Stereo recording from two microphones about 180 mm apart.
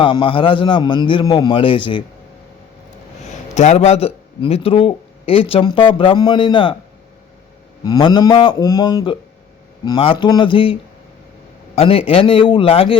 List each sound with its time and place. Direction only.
0.0 s a man's voice: 30° left (ahead or behind)
3.2 s a man's voice: 40° left (ahead or behind)
7.9 s a man's voice: 25° left (ahead or behind)